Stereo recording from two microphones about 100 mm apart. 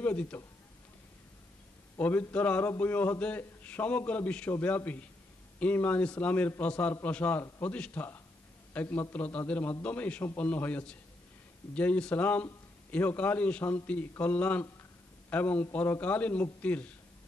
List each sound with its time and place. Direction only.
0.0 s a man's voice: 15° left (ahead or behind)
2.0 s a man's voice: 20° left (ahead or behind)